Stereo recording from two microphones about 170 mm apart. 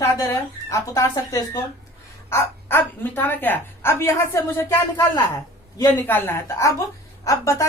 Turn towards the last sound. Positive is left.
turn(degrees=20)  # may be behind; listen again after turning